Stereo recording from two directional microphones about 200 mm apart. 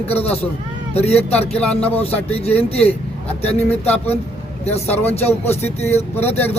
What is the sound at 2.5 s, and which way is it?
Speech, 10° left (ahead or behind).